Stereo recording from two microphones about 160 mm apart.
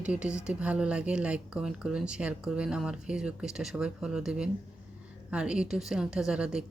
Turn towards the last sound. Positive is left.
turn(degrees=-5)  # may be behind; listen again after turning